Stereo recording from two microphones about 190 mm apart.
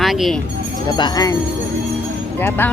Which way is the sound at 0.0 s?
Centre (ahead or behind).